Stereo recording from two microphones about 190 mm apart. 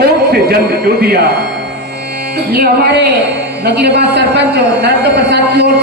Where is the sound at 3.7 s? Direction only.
60° right (ahead or behind).